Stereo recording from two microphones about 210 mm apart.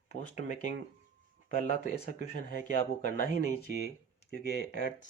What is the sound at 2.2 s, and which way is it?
Speech, 60° right (ahead or behind).